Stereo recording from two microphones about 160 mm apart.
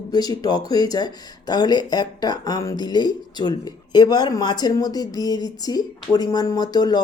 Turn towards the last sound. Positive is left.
turn(degrees=25)  # may be behind; listen again after turning